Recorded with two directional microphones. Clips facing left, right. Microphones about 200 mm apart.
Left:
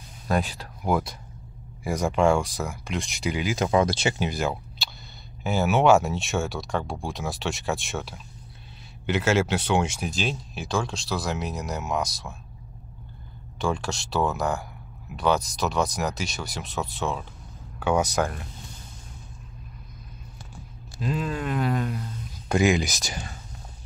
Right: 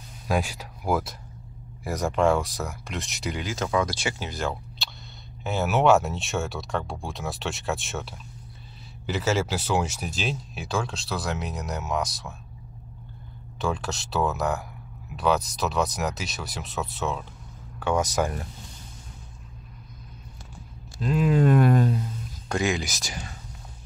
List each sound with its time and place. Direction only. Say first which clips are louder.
0.3 s speech: left 1 dB; 10° right (ahead or behind); by 4.3 s 25° left (ahead or behind)
4.3 s speech: left 2 dB; 10° left (ahead or behind)
13.6 s speech: left 1 dB; centre (ahead or behind)
21.0 s speech: right 4 dB; 5° right (ahead or behind)
21.5 s speech: right 5 dB; 50° right (ahead or behind)
22.5 s speech: left 4 dB; 10° left (ahead or behind)